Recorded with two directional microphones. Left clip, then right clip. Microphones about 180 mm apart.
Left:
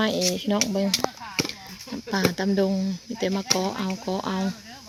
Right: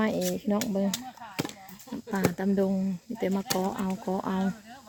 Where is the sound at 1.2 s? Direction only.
25° right (ahead or behind).